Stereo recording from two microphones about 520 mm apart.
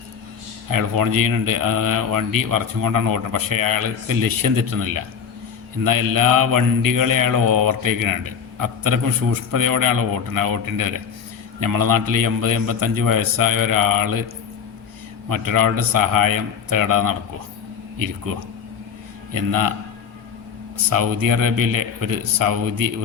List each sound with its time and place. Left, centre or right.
0.7 s speech: right
15.3 s speech: right
19.3 s speech: right
20.9 s speech: right